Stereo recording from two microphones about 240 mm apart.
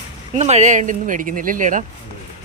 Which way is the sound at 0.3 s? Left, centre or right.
Right.